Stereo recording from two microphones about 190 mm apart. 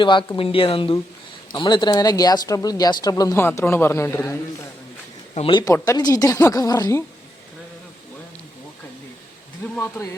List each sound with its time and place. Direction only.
0.0 s speech: 25° left (ahead or behind)
5.3 s speech: 30° left (ahead or behind)
9.7 s speech: 15° left (ahead or behind)